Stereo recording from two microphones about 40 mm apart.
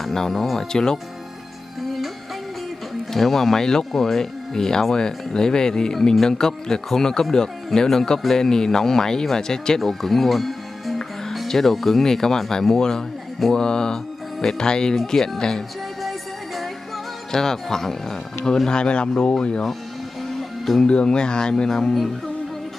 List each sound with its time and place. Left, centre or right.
0.1 s speech: centre
1.8 s music: centre
3.1 s speech: centre
16.0 s music: centre
17.3 s speech: centre
18.7 s speech: left
20.2 s music: centre
20.8 s speech: left
21.6 s speech: centre